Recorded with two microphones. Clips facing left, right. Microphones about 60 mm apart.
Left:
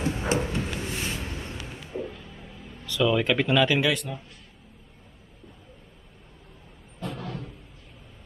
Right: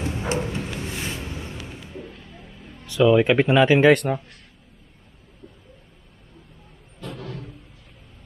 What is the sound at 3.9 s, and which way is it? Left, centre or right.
Speech, right.